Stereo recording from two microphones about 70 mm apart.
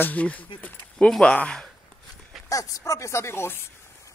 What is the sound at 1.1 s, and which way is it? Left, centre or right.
Speech, centre.